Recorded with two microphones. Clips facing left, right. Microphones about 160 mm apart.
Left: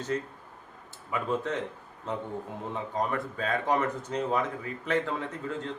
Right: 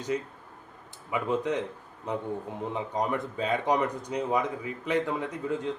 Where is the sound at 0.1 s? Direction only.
10° right (ahead or behind).